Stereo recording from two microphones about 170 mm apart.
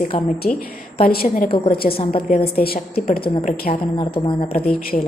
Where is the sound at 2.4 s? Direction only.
65° left (ahead or behind).